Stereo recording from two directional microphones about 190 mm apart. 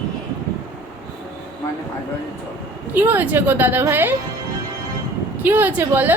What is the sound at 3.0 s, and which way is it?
A woman's voice, 10° right (ahead or behind).